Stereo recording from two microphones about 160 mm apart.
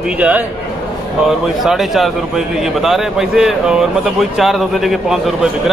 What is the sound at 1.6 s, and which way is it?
A man's voice, centre (ahead or behind).